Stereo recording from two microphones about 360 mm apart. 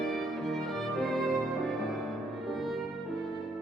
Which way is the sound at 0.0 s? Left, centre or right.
Centre.